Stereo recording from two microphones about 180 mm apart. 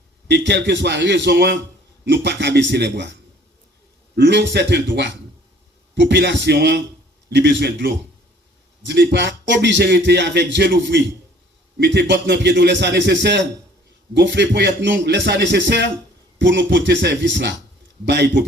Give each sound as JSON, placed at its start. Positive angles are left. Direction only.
{"t": 0.3, "sound": "a man's voice", "side_deg": -70}